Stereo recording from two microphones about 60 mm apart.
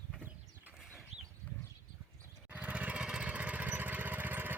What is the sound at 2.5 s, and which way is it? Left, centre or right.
Lawn mower, right.